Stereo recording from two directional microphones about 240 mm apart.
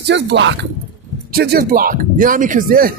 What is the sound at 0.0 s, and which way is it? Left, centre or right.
A man's voice, right.